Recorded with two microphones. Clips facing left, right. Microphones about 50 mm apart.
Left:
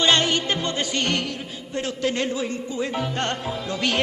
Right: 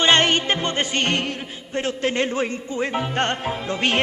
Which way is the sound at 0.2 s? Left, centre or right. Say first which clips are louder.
Right 3 dB; right.